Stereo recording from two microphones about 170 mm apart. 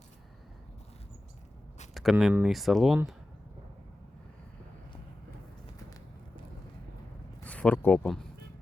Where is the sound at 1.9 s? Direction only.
Centre (ahead or behind).